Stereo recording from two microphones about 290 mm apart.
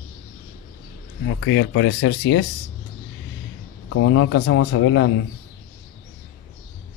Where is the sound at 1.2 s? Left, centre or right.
Left.